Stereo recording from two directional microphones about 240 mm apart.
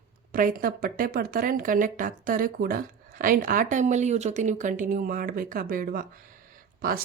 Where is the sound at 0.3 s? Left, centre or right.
Right.